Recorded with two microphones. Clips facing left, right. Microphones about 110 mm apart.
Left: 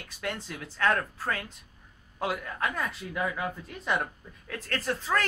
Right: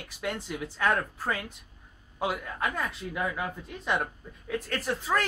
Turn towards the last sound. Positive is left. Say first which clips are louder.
# even
turn(degrees=-10)  # may be behind; listen again after turning